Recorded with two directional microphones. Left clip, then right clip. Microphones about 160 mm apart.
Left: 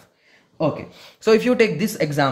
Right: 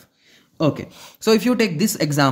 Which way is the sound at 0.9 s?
50° right (ahead or behind).